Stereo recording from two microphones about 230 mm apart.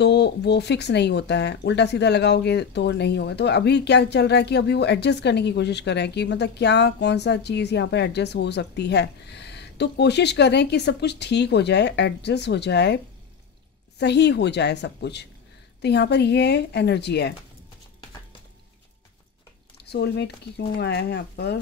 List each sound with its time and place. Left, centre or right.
0.0 s speech: left
19.8 s speech: left